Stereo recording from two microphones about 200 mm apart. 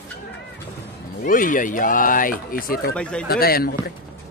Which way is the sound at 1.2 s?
40° left (ahead or behind).